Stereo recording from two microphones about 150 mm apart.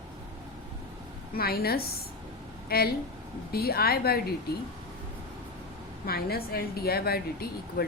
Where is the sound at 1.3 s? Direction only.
90° left.